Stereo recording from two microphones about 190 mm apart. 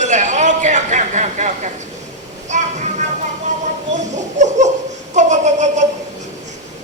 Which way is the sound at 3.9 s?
40° right (ahead or behind).